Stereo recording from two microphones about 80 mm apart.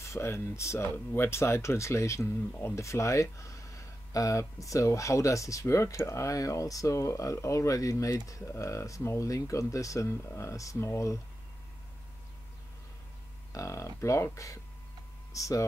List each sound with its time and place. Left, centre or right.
0.0 s speech: left
13.5 s speech: left